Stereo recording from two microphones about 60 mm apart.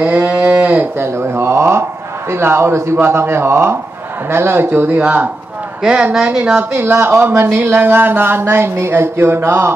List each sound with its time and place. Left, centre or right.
0.0 s livestock: centre
0.9 s a sound: right
2.3 s speech: right
5.0 s a woman's voice: right
6.7 s speech: right